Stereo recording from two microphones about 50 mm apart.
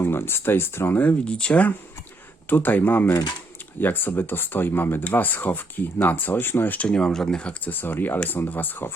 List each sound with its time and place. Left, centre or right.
0.0 s speech: left
1.2 s speech: left
2.5 s speech: left
6.8 s speech: centre
7.6 s speech: left